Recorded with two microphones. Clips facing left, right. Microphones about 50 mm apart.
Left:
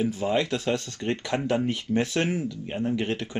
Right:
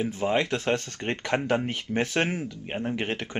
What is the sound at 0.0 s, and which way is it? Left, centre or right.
Speech, right.